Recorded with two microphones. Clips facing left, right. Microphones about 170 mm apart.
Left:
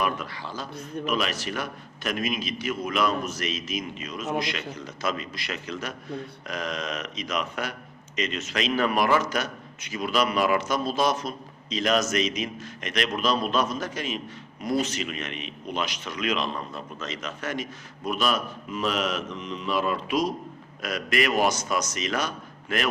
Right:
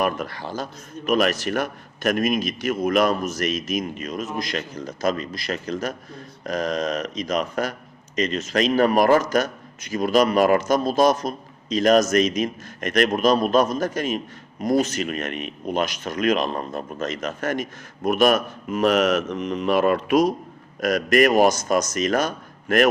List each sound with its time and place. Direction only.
0.0 s a man's voice: 45° right (ahead or behind)
18.9 s mantra: 75° right (ahead or behind)
19.5 s a man's voice: 65° right (ahead or behind); by 22.3 s 45° right (ahead or behind)